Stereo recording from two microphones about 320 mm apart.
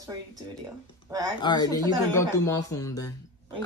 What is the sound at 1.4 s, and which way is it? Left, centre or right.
Speech, centre.